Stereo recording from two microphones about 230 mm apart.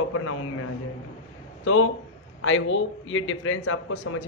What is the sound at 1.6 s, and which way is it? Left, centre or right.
A man's voice, left.